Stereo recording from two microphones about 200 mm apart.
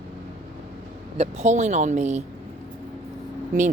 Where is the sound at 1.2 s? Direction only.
35° right (ahead or behind).